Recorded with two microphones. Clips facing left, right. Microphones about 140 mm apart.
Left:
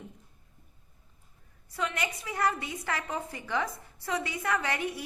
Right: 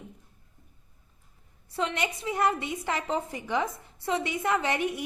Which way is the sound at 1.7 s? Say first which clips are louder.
Right 3 dB; 25° right (ahead or behind).